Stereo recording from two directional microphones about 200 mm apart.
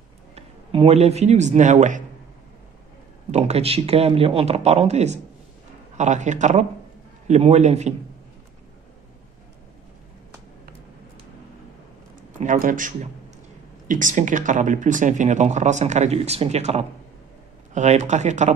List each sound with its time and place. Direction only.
0.7 s speech: 30° right (ahead or behind)
3.3 s speech: 35° right (ahead or behind)
12.4 s speech: 40° right (ahead or behind)